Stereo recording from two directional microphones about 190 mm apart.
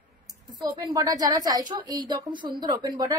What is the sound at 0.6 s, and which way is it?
A woman's voice, 20° right (ahead or behind).